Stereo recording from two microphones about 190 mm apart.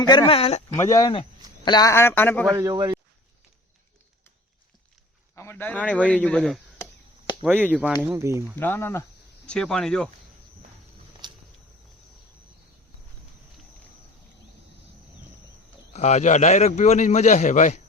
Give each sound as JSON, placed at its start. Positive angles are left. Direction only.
{"t": 0.0, "sound": "a man's voice", "side_deg": 25}
{"t": 0.8, "sound": "a man's voice", "side_deg": 20}
{"t": 2.5, "sound": "speech", "side_deg": -15}
{"t": 5.3, "sound": "a man's voice", "side_deg": 15}
{"t": 7.4, "sound": "speech", "side_deg": -10}
{"t": 8.5, "sound": "a man's voice", "side_deg": 10}
{"t": 11.2, "sound": "a sound", "side_deg": -25}
{"t": 15.9, "sound": "a man's voice", "side_deg": 35}